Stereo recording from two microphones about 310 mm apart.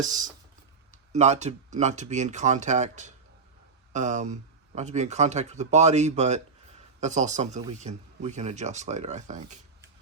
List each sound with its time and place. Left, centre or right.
0.0 s speech: right